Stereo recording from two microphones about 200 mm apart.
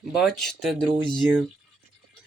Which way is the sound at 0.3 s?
Centre (ahead or behind).